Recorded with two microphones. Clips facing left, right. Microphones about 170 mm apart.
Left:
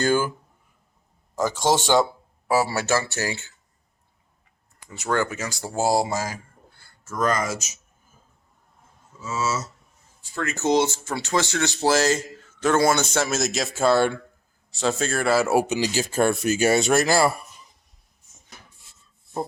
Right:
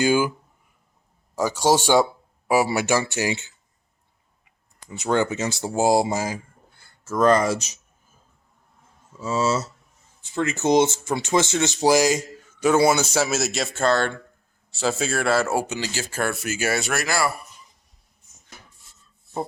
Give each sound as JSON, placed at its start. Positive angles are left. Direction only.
{"t": 0.0, "sound": "speech", "side_deg": -10}
{"t": 1.4, "sound": "speech", "side_deg": -10}
{"t": 4.9, "sound": "speech", "side_deg": -20}
{"t": 7.0, "sound": "speech", "side_deg": -30}
{"t": 9.2, "sound": "speech", "side_deg": -30}
{"t": 10.3, "sound": "speech", "side_deg": -20}
{"t": 14.8, "sound": "speech", "side_deg": -5}